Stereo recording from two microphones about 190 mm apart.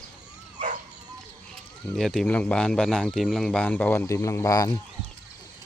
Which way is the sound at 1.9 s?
Centre (ahead or behind).